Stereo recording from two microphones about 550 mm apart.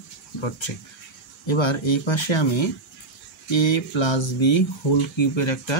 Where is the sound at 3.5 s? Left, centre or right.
Left.